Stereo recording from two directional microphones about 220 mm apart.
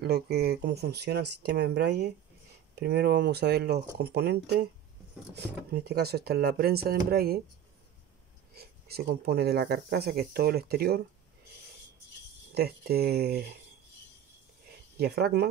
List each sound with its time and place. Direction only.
0.0 s speech: 45° right (ahead or behind)
8.5 s speech: 45° right (ahead or behind)
12.5 s speech: 45° right (ahead or behind)
15.0 s speech: 45° right (ahead or behind)